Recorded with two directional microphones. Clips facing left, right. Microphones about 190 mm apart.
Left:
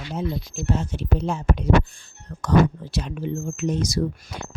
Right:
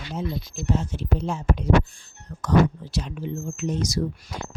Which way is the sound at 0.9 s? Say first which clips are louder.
Left 2 dB; 65° left (ahead or behind).